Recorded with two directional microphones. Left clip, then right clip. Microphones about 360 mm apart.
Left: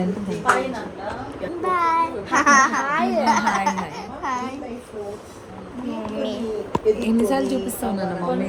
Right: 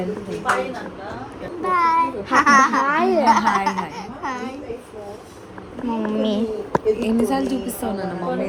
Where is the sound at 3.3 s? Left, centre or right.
Centre.